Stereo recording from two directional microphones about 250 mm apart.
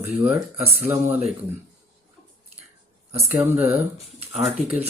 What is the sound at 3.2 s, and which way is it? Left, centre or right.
Speech, centre.